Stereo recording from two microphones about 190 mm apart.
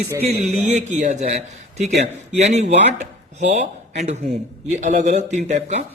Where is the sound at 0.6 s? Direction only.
40° right (ahead or behind).